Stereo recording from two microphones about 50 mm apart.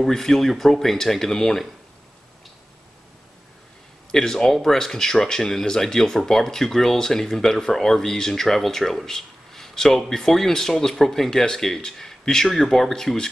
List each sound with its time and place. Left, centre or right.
0.0 s speech: centre
4.1 s speech: centre